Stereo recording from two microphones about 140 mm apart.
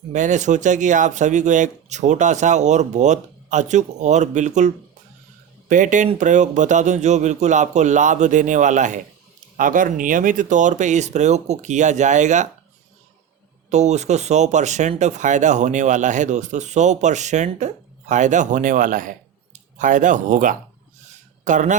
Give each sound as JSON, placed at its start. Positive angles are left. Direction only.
{"t": 0.1, "sound": "speech", "side_deg": -60}
{"t": 9.6, "sound": "speech", "side_deg": -75}
{"t": 13.7, "sound": "speech", "side_deg": -55}
{"t": 19.5, "sound": "speech", "side_deg": -60}